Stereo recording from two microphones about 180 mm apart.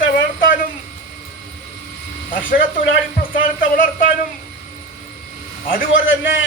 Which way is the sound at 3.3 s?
50° left (ahead or behind).